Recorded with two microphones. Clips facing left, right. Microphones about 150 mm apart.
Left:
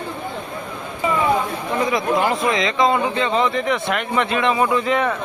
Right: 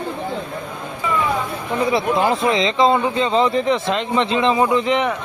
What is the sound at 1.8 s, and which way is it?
A man's voice, 30° right (ahead or behind).